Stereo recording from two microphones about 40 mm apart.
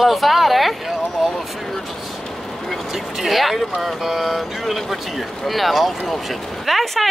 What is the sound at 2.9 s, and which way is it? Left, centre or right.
A woman's voice, centre.